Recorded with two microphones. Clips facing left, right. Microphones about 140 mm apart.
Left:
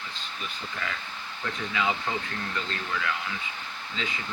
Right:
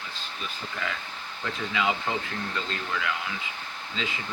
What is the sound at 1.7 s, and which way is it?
Speech, 20° right (ahead or behind).